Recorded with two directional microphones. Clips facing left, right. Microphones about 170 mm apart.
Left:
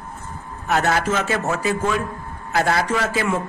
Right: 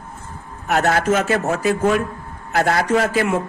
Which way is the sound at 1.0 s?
55° right (ahead or behind).